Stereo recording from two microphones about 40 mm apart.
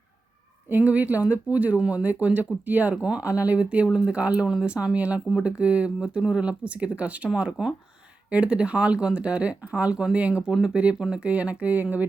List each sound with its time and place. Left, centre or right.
0.7 s speech: right
2.9 s speech: right
3.2 s speech: right